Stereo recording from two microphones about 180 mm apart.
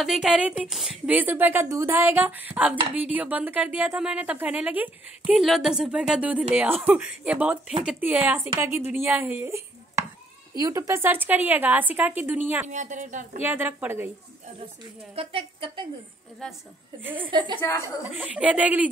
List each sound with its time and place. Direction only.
0.0 s speech: 5° right (ahead or behind)
12.6 s speech: 45° right (ahead or behind)
13.4 s speech: 10° right (ahead or behind)
15.1 s speech: 30° right (ahead or behind)
17.2 s speech: 25° right (ahead or behind)
17.6 s a woman's voice: 15° left (ahead or behind)
18.1 s speech: 5° right (ahead or behind)